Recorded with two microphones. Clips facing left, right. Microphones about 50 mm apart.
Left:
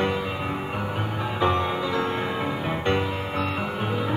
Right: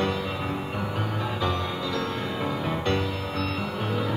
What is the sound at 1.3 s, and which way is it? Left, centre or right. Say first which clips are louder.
Music: left 8 dB; left.